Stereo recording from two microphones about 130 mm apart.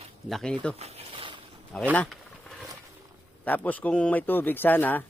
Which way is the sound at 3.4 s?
10° left (ahead or behind).